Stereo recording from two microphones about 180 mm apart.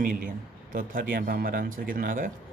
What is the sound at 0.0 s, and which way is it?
Speech, 45° right (ahead or behind).